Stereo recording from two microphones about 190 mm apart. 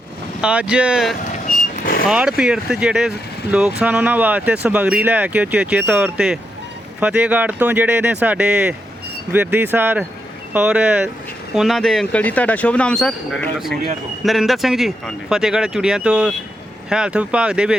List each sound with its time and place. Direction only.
0.4 s speech: 5° right (ahead or behind)
1.8 s vehicle: 50° left (ahead or behind)
2.0 s speech: 5° right (ahead or behind)